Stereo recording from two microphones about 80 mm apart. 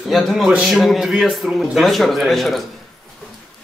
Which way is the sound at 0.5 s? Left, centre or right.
Centre.